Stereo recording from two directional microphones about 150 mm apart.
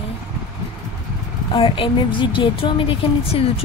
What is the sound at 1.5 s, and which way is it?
Speech, 35° left (ahead or behind).